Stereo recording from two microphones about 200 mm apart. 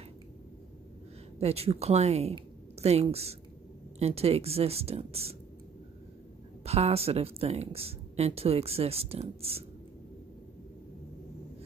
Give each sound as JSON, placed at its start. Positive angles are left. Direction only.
{"t": 1.4, "sound": "speech", "side_deg": -30}
{"t": 6.6, "sound": "speech", "side_deg": -30}